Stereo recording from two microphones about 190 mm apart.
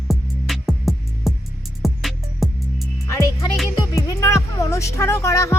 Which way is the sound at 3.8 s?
15° left (ahead or behind).